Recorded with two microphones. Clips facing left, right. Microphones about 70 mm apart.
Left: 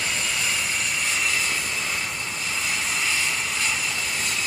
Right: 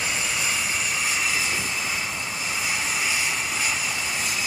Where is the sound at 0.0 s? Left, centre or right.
Centre.